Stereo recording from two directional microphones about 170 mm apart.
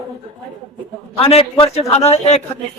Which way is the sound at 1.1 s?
35° left (ahead or behind).